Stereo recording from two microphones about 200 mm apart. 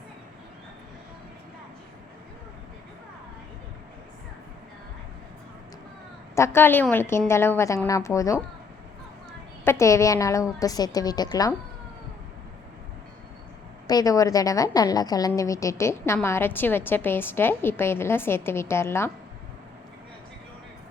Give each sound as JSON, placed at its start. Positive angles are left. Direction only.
{"t": 6.3, "sound": "a woman's voice", "side_deg": 15}
{"t": 9.6, "sound": "a woman's voice", "side_deg": 15}
{"t": 13.8, "sound": "a woman's voice", "side_deg": 20}